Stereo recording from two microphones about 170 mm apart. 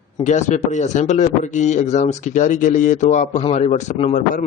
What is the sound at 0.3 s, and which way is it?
A man's voice, 45° left (ahead or behind).